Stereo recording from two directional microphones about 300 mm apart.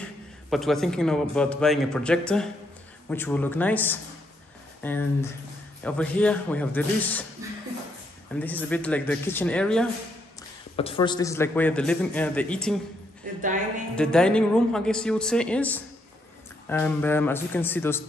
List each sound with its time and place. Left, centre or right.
0.5 s a man's voice: centre
8.4 s a man's voice: centre
10.8 s a man's voice: centre
13.9 s a man's voice: centre